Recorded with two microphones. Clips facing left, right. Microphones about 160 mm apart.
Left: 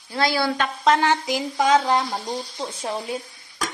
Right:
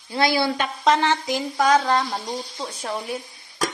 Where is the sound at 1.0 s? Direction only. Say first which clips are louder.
Left 1 dB; 15° left (ahead or behind).